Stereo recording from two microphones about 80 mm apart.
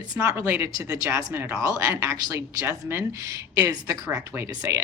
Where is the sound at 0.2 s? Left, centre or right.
Right.